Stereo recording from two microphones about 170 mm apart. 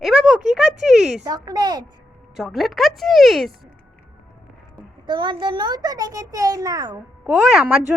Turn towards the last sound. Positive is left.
turn(degrees=-5)  # may be behind; listen again after turning